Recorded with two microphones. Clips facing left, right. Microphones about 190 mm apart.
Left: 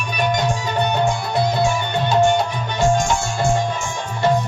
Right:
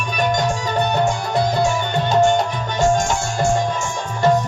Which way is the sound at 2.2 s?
45° right (ahead or behind).